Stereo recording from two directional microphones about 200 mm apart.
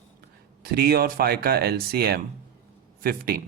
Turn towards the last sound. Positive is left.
turn(degrees=-50)  # may be behind; listen again after turning